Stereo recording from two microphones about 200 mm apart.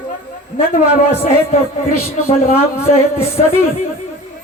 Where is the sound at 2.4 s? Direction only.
30° left (ahead or behind).